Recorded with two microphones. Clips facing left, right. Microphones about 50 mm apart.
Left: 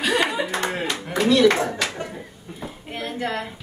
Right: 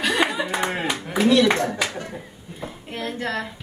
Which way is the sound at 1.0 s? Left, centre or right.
Centre.